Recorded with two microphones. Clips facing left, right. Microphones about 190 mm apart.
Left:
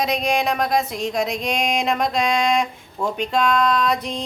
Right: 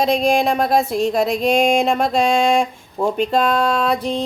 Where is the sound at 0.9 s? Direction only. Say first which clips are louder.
Right 6 dB; centre (ahead or behind).